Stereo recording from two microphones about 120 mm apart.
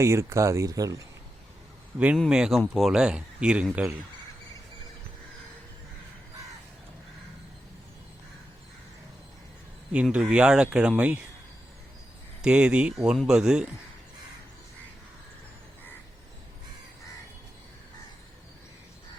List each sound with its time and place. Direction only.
0.0 s speech: 25° right (ahead or behind)
2.3 s speech: 5° right (ahead or behind)
9.9 s speech: 10° right (ahead or behind)
12.4 s speech: 5° right (ahead or behind)